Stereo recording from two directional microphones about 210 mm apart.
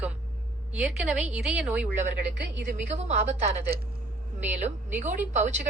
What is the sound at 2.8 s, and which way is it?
Speech, 30° right (ahead or behind).